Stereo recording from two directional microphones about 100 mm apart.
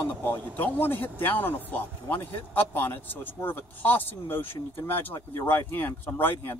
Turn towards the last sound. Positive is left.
turn(degrees=20)  # may be behind; listen again after turning